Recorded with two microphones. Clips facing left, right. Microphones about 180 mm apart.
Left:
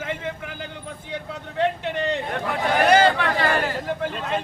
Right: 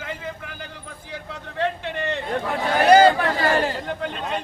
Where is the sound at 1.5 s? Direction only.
20° left (ahead or behind).